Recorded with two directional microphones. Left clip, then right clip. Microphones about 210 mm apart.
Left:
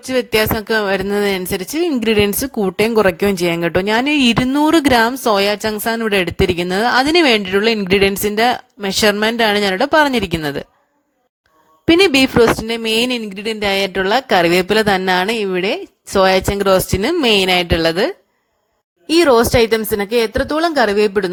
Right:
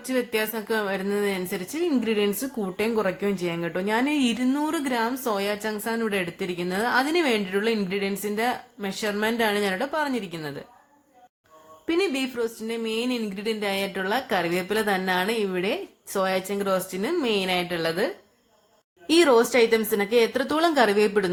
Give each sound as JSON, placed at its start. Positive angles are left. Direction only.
{"t": 0.1, "sound": "speech", "side_deg": 45}
{"t": 11.9, "sound": "speech", "side_deg": 45}
{"t": 19.0, "sound": "speech", "side_deg": 30}